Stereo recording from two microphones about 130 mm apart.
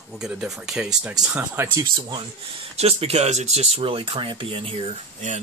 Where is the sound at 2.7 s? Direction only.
50° right (ahead or behind).